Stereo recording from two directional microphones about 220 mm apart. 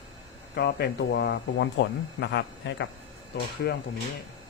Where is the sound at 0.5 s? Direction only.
50° left (ahead or behind).